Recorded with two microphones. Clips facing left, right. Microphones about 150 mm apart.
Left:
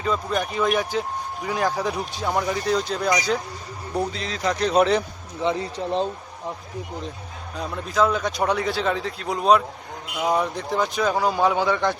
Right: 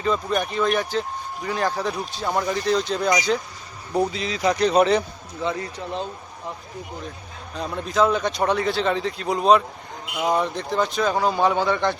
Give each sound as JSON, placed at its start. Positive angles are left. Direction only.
{"t": 0.0, "sound": "speech", "side_deg": 5}
{"t": 3.1, "sound": "speech", "side_deg": -5}
{"t": 5.4, "sound": "speech", "side_deg": 20}
{"t": 5.7, "sound": "speech", "side_deg": 35}
{"t": 7.5, "sound": "speech", "side_deg": 5}